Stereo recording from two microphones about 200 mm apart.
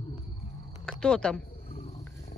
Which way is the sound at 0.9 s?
5° left (ahead or behind).